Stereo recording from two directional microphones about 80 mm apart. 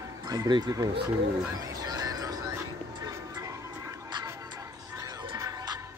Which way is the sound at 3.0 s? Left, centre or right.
Right.